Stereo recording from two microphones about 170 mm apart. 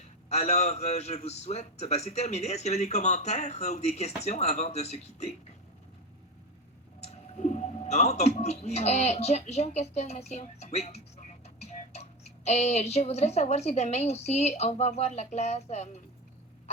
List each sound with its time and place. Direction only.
0.3 s a man's voice: 40° left (ahead or behind)
7.0 s speech: 40° left (ahead or behind)